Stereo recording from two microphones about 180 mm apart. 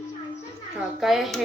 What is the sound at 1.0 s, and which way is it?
Speech, centre (ahead or behind).